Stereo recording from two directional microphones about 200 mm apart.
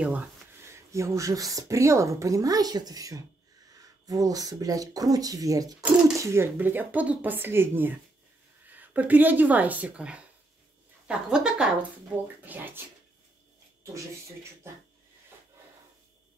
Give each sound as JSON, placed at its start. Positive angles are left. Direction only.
{"t": 0.0, "sound": "speech", "side_deg": -5}
{"t": 5.8, "sound": "speech", "side_deg": -5}